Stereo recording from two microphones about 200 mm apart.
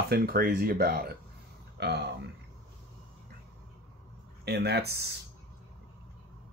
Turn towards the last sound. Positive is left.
turn(degrees=-55)  # may be behind; listen again after turning